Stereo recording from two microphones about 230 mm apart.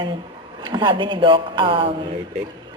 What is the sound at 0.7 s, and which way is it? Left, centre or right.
A woman's voice, right.